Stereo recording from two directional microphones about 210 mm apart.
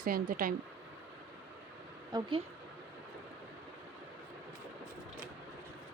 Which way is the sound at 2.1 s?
20° right (ahead or behind).